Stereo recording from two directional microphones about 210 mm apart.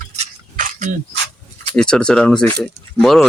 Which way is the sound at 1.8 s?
5° left (ahead or behind).